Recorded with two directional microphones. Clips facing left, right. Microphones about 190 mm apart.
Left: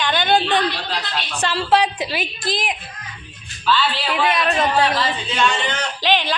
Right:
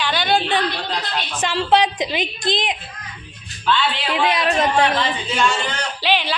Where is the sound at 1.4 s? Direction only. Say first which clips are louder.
Right 1 dB; 10° right (ahead or behind).